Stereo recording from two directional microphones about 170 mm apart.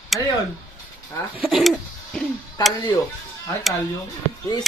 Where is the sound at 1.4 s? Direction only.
Centre (ahead or behind).